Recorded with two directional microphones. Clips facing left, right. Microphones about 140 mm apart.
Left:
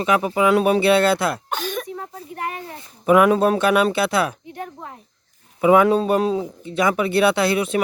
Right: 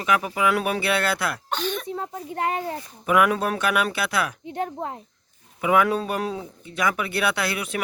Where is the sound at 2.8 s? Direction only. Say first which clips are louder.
Left 7 dB; 30° left (ahead or behind).